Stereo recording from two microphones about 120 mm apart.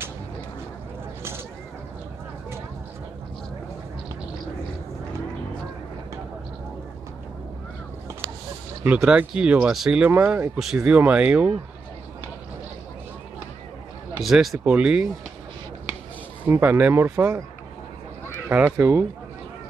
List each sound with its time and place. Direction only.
8.8 s speech: 10° right (ahead or behind)
14.2 s speech: centre (ahead or behind)
16.4 s speech: 15° right (ahead or behind)
18.7 s speech: 20° right (ahead or behind)